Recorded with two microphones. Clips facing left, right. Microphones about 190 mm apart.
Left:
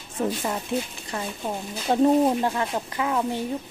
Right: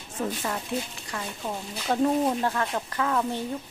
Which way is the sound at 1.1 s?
20° left (ahead or behind).